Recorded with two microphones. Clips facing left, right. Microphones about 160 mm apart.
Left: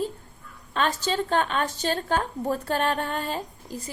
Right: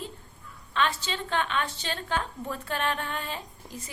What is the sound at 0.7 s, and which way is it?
A woman's voice, 40° left (ahead or behind).